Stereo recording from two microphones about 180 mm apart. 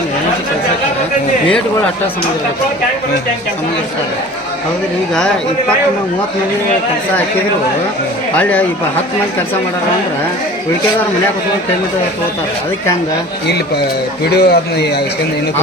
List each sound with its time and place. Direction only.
5.1 s speech: 5° left (ahead or behind)
8.4 s speech: 10° left (ahead or behind)
14.3 s a man's voice: 65° left (ahead or behind)